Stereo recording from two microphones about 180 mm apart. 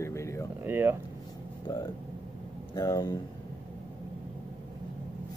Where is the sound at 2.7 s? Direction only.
20° left (ahead or behind).